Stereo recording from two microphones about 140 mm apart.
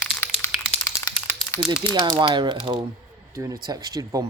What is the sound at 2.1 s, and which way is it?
Speech, 35° right (ahead or behind).